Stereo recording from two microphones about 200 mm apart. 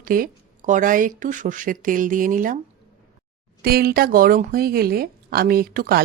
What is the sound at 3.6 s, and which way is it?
Speech, 50° right (ahead or behind).